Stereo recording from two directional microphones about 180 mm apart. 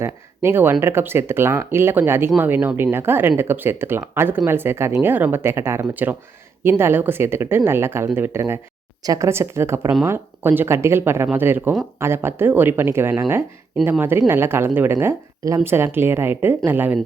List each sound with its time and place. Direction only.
0.0 s speech: 10° right (ahead or behind)